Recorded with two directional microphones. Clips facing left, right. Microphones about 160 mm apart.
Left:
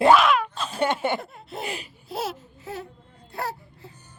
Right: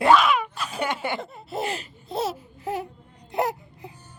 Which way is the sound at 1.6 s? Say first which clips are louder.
Right 3 dB; 15° left (ahead or behind).